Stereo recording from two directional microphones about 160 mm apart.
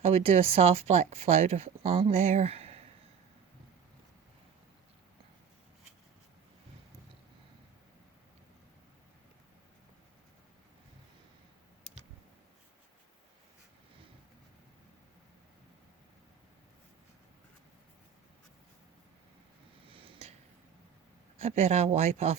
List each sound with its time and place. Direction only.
0.0 s speech: 40° right (ahead or behind)
19.8 s a sound: 35° right (ahead or behind)
21.4 s speech: 40° right (ahead or behind)